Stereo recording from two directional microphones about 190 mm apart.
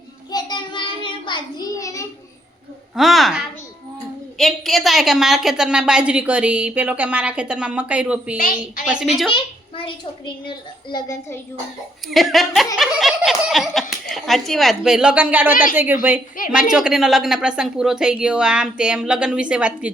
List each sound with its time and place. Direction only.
0.3 s child singing: 20° left (ahead or behind)
2.9 s a woman's voice: centre (ahead or behind)
8.4 s a woman's voice: 45° left (ahead or behind)
9.3 s a child's voice: 25° left (ahead or behind)
12.0 s a woman's voice: centre (ahead or behind)